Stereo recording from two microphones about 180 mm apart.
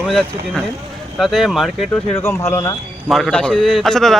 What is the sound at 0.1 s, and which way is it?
A man's voice, centre (ahead or behind).